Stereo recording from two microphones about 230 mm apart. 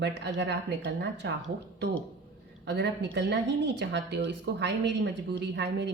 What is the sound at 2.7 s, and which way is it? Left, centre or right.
A woman's voice, right.